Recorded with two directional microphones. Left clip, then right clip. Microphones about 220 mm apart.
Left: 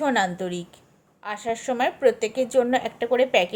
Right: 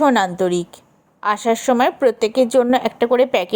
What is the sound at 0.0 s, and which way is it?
A woman's voice, 30° right (ahead or behind).